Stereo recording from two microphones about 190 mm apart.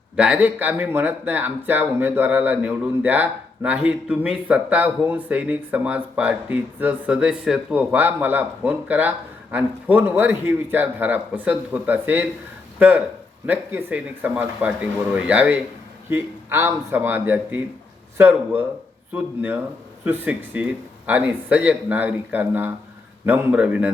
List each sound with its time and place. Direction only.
0.2 s speech: 5° right (ahead or behind)